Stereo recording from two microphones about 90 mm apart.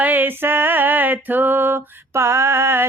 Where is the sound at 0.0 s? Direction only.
20° right (ahead or behind).